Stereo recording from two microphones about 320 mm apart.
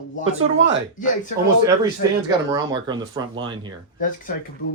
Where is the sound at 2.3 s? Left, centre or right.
Centre.